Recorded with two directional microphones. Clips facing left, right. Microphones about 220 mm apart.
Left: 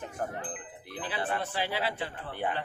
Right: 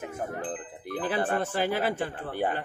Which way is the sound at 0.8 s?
50° right (ahead or behind).